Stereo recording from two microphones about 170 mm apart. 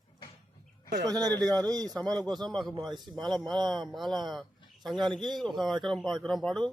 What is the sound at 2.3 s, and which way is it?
Speech, 5° left (ahead or behind).